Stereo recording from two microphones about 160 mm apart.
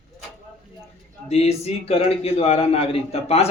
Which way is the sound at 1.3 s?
40° left (ahead or behind).